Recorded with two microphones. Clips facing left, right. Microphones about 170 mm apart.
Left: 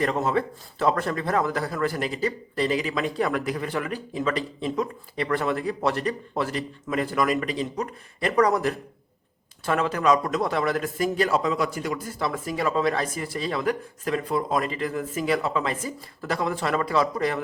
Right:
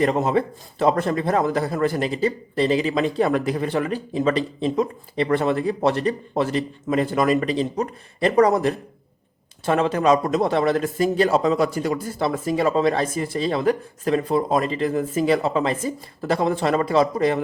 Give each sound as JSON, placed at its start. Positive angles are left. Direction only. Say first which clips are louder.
{"t": 0.0, "sound": "a man's voice", "louder": "right 4 dB", "side_deg": -20}